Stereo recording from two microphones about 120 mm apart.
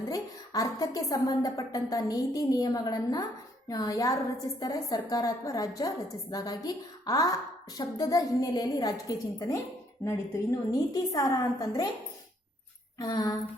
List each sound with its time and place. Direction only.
0.0 s a woman's voice: 30° left (ahead or behind)
13.0 s a woman's voice: 30° left (ahead or behind)